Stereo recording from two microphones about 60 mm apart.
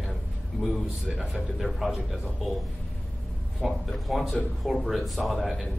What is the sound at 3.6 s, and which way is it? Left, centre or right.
Speech, centre.